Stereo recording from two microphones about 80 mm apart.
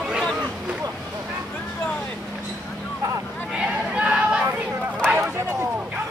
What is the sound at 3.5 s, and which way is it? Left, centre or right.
Chatter, centre.